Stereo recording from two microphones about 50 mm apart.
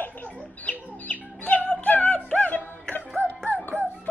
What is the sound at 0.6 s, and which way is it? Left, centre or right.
Chicken, left.